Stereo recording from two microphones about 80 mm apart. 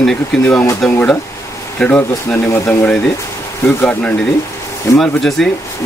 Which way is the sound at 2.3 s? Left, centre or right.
Left.